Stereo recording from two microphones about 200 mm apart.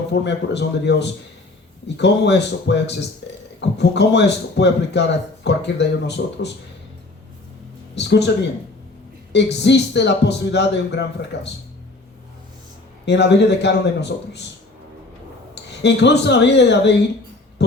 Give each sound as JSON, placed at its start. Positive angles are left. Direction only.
{"t": 0.1, "sound": "a man's voice", "side_deg": 60}
{"t": 7.9, "sound": "a man's voice", "side_deg": 60}
{"t": 9.3, "sound": "a man's voice", "side_deg": 60}
{"t": 13.1, "sound": "a man's voice", "side_deg": 60}
{"t": 15.8, "sound": "a man's voice", "side_deg": 60}